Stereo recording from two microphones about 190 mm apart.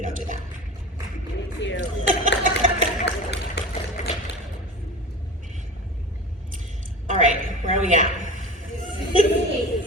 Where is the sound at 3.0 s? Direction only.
65° left (ahead or behind).